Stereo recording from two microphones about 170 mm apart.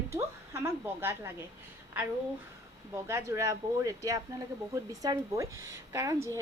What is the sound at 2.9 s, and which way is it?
A woman's voice, 15° right (ahead or behind).